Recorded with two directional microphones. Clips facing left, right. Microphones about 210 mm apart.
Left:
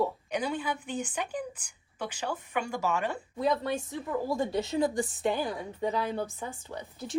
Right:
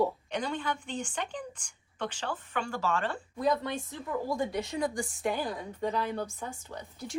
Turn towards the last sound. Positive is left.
turn(degrees=10)  # may be behind; listen again after turning